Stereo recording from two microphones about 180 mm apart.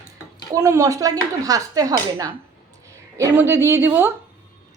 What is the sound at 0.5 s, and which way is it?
A woman's voice, 15° right (ahead or behind).